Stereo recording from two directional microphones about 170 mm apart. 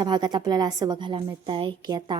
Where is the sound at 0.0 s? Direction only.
25° right (ahead or behind).